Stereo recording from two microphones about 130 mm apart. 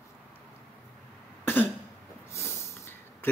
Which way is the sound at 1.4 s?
15° left (ahead or behind).